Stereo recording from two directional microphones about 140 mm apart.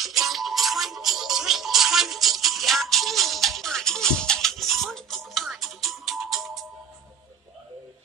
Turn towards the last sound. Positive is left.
turn(degrees=0)  # may be behind; listen again after turning